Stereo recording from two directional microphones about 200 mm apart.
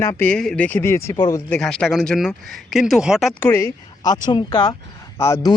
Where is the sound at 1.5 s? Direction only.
5° left (ahead or behind).